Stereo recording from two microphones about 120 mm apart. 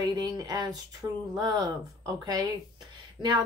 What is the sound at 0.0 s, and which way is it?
A woman's voice, 30° right (ahead or behind).